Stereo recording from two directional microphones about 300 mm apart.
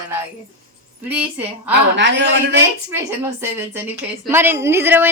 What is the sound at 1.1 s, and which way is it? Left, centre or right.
Speech, centre.